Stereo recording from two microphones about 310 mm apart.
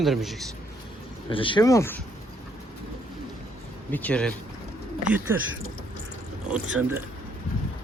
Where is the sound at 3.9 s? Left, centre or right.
Centre.